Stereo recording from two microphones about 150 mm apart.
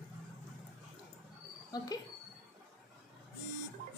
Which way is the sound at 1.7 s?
25° left (ahead or behind).